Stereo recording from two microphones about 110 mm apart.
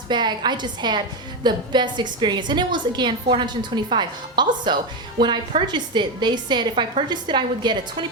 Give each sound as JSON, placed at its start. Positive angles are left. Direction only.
{"t": 0.1, "sound": "a woman's voice", "side_deg": -40}